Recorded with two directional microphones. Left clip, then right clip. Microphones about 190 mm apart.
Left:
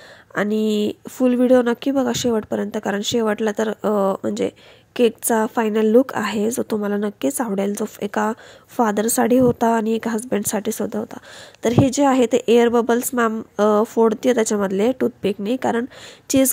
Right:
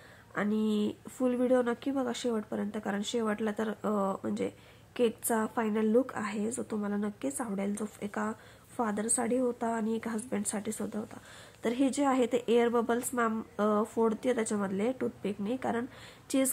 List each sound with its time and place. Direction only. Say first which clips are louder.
0.3 s speech: left 12 dB; 40° left (ahead or behind)